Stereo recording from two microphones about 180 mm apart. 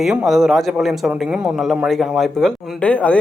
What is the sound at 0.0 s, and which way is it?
A man's voice, 5° right (ahead or behind).